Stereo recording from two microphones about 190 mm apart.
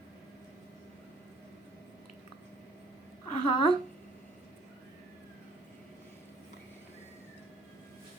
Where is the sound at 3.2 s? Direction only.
30° left (ahead or behind).